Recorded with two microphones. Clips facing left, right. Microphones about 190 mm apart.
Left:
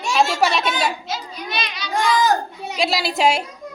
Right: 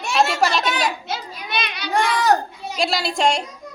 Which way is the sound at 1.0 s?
55° right (ahead or behind).